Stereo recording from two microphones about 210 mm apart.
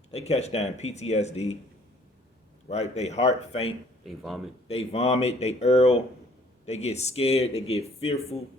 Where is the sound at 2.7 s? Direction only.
30° left (ahead or behind).